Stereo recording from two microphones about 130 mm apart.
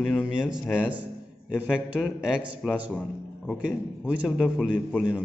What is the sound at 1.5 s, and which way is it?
A man's voice, 10° right (ahead or behind).